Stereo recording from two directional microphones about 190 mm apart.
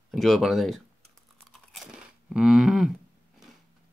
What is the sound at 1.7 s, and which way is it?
Crunch, centre (ahead or behind).